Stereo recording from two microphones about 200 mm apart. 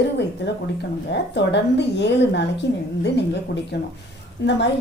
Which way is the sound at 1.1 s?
60° left (ahead or behind).